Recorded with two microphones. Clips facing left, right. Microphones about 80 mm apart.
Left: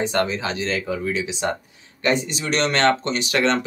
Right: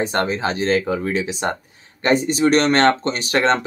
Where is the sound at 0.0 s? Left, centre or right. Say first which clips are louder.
Right 2 dB; right.